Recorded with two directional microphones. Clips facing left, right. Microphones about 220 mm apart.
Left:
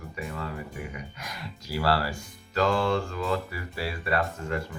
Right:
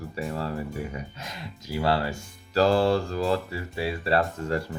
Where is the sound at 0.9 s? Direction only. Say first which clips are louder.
Right 3 dB; 25° right (ahead or behind).